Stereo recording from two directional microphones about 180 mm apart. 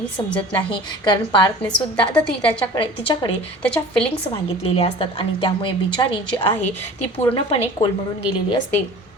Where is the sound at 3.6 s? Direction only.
5° left (ahead or behind).